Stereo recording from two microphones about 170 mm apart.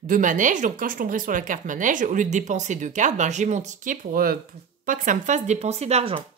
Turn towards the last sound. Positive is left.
turn(degrees=-40)  # may be behind; listen again after turning